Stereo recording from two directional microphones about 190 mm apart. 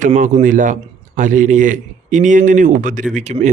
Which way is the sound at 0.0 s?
40° right (ahead or behind).